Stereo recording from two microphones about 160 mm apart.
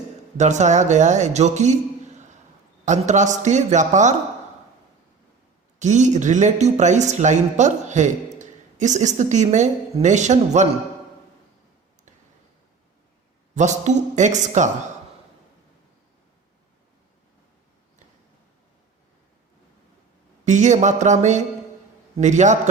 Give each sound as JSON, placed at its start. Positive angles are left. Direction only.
{"t": 0.3, "sound": "a man's voice", "side_deg": -45}
{"t": 5.8, "sound": "speech", "side_deg": -50}
{"t": 13.5, "sound": "speech", "side_deg": -50}
{"t": 20.4, "sound": "speech", "side_deg": -50}